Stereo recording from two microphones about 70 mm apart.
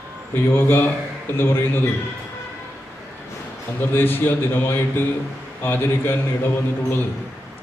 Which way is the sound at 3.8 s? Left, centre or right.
Left.